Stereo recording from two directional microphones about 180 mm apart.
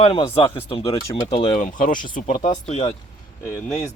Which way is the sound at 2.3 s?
25° left (ahead or behind).